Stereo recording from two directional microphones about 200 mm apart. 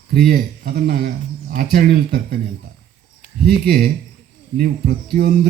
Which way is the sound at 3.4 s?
50° right (ahead or behind).